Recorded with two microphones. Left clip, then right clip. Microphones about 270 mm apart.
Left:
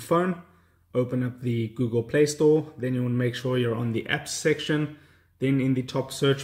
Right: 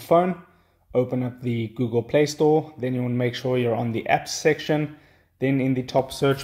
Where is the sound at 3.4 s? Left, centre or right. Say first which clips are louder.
Right 4 dB; right.